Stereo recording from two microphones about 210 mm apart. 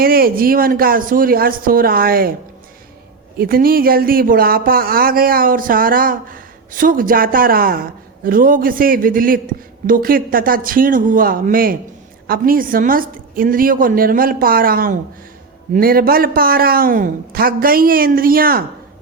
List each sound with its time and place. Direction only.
0.0 s speech: 45° right (ahead or behind)
3.3 s speech: 45° right (ahead or behind)